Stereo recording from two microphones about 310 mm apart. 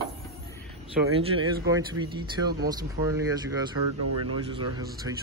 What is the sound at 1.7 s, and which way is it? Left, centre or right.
Speech, centre.